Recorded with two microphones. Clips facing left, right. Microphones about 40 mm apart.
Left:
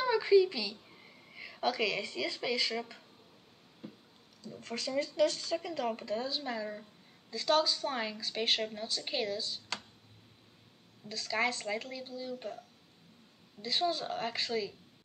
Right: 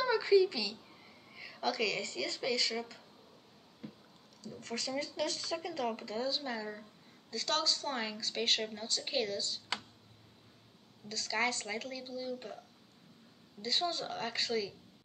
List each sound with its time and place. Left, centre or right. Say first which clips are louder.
0.0 s a woman's voice: left 2 dB; centre
4.4 s a woman's voice: even; centre
11.1 s a woman's voice: left 1 dB; centre
13.6 s a woman's voice: left 2 dB; centre